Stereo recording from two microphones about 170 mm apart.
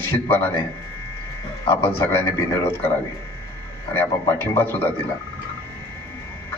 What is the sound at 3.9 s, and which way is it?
A man's voice, 15° left (ahead or behind).